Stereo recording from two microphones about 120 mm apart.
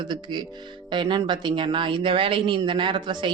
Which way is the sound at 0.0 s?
40° right (ahead or behind).